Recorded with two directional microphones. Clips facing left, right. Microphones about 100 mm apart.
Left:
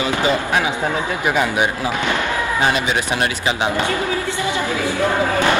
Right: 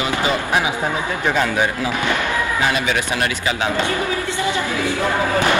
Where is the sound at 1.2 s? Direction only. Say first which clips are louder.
Even; 15° left (ahead or behind).